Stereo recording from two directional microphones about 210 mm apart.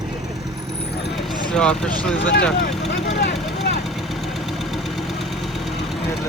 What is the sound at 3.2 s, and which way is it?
Vehicle, 50° left (ahead or behind).